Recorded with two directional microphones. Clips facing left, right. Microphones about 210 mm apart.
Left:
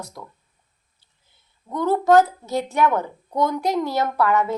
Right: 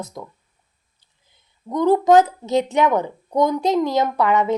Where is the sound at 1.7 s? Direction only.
15° right (ahead or behind).